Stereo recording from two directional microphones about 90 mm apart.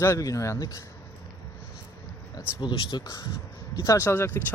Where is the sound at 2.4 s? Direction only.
55° left (ahead or behind).